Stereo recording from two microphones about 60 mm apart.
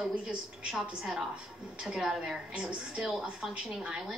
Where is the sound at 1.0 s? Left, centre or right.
Centre.